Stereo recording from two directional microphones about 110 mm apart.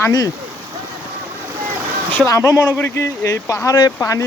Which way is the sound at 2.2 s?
30° left (ahead or behind).